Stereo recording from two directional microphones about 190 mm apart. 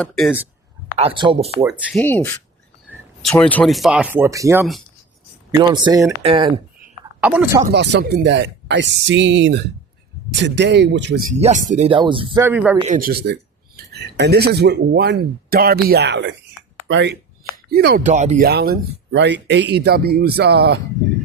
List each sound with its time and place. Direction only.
0.0 s speech: centre (ahead or behind)
0.9 s speech: 30° right (ahead or behind)
1.8 s speech: 5° left (ahead or behind); by 6.5 s 25° right (ahead or behind)
7.2 s speech: 10° right (ahead or behind)
7.7 s speech: 65° right (ahead or behind)
11.2 s speech: 40° right (ahead or behind)
11.9 s speech: 25° right (ahead or behind)
12.4 s speech: 10° right (ahead or behind)
12.8 s speech: 45° right (ahead or behind); by 17.2 s 70° right (ahead or behind)
17.5 s a sound: 55° right (ahead or behind)
18.0 s speech: 40° right (ahead or behind)
18.4 s speech: 55° right (ahead or behind)